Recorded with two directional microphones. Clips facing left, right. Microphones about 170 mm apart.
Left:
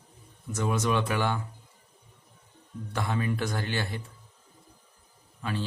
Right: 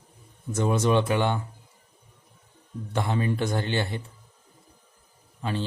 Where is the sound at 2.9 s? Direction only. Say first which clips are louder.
Right 3 dB; 25° right (ahead or behind).